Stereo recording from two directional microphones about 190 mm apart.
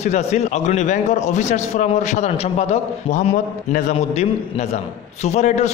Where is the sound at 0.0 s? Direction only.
35° left (ahead or behind).